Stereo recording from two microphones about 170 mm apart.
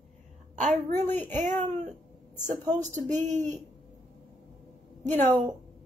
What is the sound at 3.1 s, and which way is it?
Speech, 45° right (ahead or behind).